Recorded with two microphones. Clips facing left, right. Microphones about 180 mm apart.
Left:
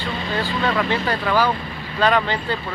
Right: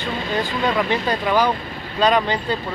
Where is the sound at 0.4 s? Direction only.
15° right (ahead or behind).